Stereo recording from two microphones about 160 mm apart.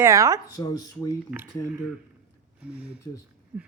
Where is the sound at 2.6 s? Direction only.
5° right (ahead or behind).